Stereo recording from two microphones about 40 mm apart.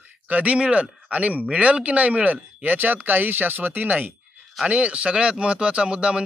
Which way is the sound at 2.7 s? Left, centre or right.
Right.